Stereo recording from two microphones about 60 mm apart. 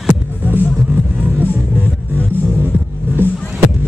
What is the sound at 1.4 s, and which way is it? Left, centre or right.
Music, right.